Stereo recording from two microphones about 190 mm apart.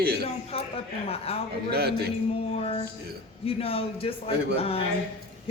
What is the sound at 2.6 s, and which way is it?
Music, 30° left (ahead or behind).